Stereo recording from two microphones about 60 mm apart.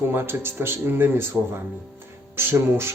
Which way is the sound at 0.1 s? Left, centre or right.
Right.